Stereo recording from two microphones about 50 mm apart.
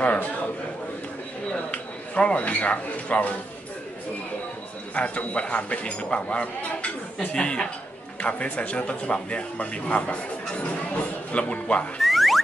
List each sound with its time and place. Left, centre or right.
0.0 s a sound: left
1.5 s speech: left
4.9 s speech: left
7.2 s speech: centre
11.3 s speech: left
12.0 s music: centre